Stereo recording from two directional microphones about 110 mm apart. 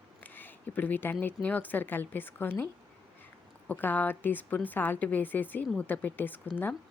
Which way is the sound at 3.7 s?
15° left (ahead or behind).